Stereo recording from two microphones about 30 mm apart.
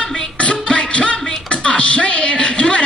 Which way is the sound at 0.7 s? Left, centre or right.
Left.